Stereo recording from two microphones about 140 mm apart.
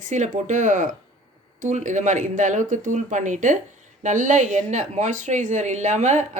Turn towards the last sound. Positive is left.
turn(degrees=-60)  # may be behind; listen again after turning